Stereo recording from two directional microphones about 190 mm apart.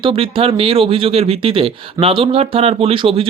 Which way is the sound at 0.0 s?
30° right (ahead or behind).